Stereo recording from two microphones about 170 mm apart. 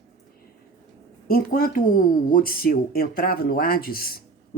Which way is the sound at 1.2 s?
60° left (ahead or behind).